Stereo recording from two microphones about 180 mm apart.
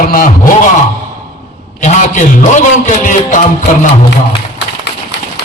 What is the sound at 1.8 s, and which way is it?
A man's voice, 45° left (ahead or behind).